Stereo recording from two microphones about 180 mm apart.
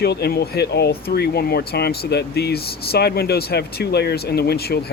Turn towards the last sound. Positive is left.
turn(degrees=60)  # may be behind; listen again after turning